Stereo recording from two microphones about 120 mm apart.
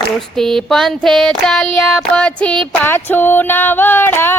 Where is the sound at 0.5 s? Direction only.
Centre (ahead or behind).